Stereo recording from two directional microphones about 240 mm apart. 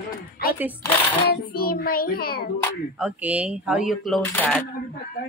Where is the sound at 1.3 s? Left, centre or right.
Left.